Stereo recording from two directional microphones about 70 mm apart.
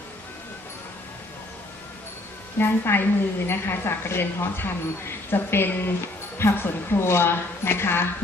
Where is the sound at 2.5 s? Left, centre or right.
Left.